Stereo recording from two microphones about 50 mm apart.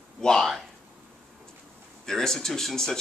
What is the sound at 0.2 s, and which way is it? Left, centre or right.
Speech, centre.